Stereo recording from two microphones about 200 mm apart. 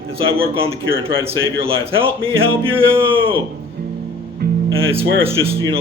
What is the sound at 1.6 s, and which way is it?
Speech, 25° right (ahead or behind).